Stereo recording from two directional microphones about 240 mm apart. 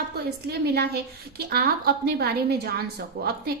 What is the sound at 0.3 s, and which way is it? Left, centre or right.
A woman's voice, right.